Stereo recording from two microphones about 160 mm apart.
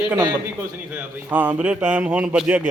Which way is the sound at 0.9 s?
10° right (ahead or behind).